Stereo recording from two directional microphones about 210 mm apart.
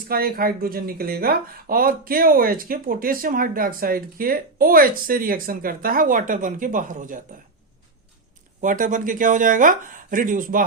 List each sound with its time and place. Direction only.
0.1 s speech: 45° right (ahead or behind)
8.6 s speech: 40° right (ahead or behind)